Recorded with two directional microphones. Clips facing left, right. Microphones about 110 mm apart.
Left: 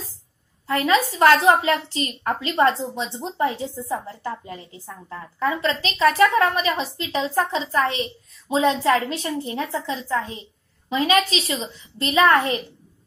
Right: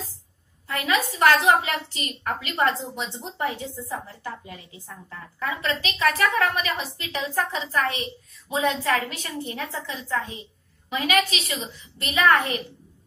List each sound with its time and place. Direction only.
0.7 s a woman's voice: 35° left (ahead or behind)